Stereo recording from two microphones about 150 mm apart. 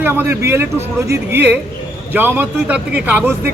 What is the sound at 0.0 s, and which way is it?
Speech, 15° right (ahead or behind).